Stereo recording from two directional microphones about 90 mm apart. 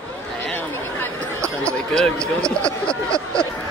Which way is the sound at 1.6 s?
10° left (ahead or behind).